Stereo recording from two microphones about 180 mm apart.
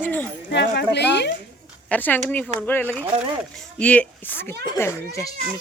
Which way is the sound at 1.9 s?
10° left (ahead or behind).